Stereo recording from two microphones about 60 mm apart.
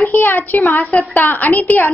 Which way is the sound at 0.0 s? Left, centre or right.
Left.